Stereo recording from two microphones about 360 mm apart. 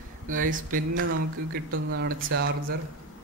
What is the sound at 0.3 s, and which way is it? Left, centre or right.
Speech, right.